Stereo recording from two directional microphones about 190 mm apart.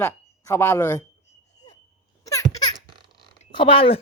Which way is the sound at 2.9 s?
25° right (ahead or behind).